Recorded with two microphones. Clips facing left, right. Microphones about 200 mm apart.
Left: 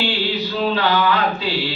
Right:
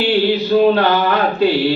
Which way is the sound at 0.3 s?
55° right (ahead or behind).